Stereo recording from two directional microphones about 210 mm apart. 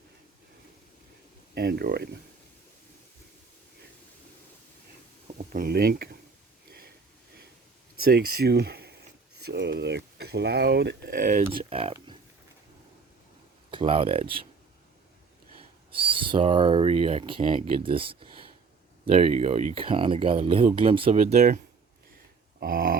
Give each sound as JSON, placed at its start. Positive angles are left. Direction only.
{"t": 1.5, "sound": "speech", "side_deg": -50}
{"t": 5.3, "sound": "speech", "side_deg": -40}
{"t": 8.0, "sound": "speech", "side_deg": -45}
{"t": 11.4, "sound": "speech", "side_deg": -25}
{"t": 13.7, "sound": "speech", "side_deg": -25}
{"t": 15.9, "sound": "speech", "side_deg": -25}
{"t": 22.6, "sound": "speech", "side_deg": -45}